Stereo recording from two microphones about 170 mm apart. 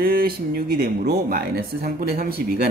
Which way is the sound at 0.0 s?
60° right (ahead or behind).